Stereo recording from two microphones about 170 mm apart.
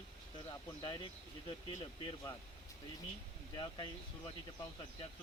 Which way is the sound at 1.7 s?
20° left (ahead or behind).